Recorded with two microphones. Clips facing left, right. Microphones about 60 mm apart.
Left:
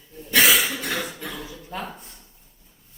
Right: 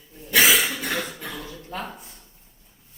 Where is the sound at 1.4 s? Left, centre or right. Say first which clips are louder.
Even; centre.